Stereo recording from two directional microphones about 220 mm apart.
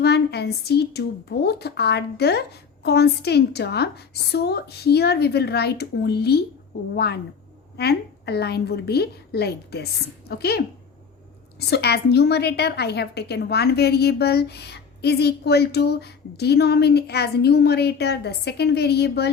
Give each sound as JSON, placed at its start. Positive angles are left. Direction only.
{"t": 0.0, "sound": "a woman's voice", "side_deg": 50}
{"t": 11.7, "sound": "a woman's voice", "side_deg": 45}